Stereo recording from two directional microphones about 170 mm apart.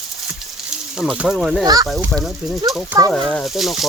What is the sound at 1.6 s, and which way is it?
Speech, 20° right (ahead or behind).